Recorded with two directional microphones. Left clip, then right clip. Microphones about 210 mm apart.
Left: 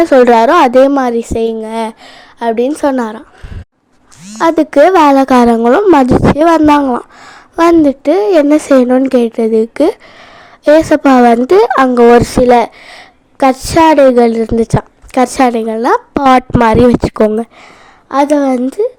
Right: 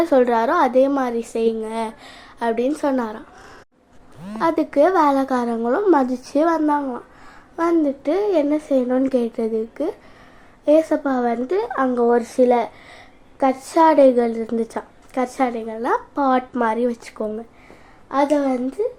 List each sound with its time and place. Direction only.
0.0 s speech: 40° left (ahead or behind)
4.4 s speech: 35° left (ahead or behind)
15.4 s speech: 55° left (ahead or behind)
18.1 s speech: 55° left (ahead or behind)